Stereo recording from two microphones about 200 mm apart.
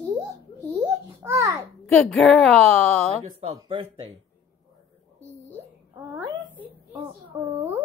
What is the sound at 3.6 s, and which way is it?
Speech, 25° right (ahead or behind).